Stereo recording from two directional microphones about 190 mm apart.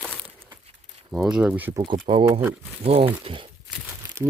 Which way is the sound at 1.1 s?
5° right (ahead or behind).